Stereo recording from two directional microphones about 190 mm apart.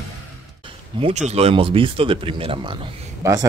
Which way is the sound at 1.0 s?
35° right (ahead or behind).